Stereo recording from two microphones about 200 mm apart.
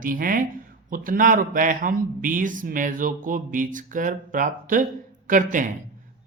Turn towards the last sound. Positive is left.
turn(degrees=-40)  # may be behind; listen again after turning